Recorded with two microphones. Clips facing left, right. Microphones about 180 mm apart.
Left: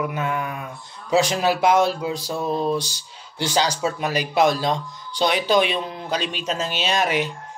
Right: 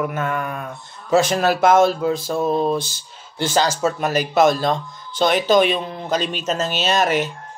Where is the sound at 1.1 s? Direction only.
50° right (ahead or behind).